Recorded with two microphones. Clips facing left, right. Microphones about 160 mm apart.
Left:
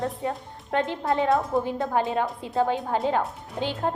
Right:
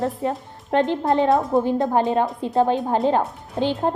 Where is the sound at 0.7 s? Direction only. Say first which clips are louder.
Right 6 dB; 25° right (ahead or behind).